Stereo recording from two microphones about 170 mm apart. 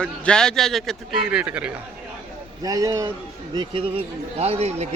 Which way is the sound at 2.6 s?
20° right (ahead or behind).